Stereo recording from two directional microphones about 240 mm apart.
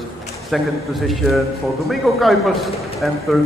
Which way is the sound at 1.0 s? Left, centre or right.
Centre.